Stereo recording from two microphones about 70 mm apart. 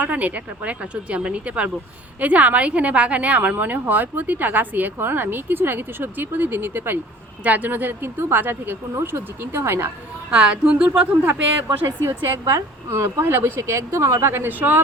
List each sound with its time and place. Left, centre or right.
0.0 s a woman's voice: right
10.3 s speech: centre
12.0 s speech: right